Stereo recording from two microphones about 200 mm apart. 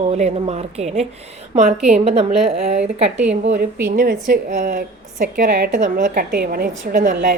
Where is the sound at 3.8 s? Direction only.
45° right (ahead or behind).